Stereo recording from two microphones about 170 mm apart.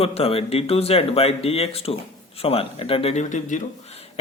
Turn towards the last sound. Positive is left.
turn(degrees=45)  # may be behind; listen again after turning